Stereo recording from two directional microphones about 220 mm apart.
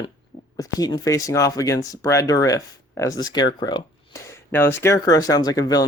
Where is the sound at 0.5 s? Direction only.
15° left (ahead or behind).